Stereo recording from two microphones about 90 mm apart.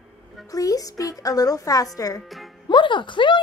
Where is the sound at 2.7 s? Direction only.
65° left (ahead or behind).